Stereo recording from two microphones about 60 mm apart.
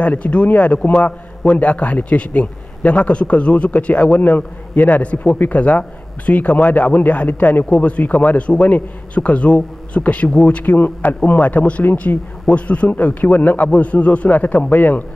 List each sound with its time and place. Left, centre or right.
0.0 s a man's voice: left
11.8 s speech: left
12.4 s a man's voice: left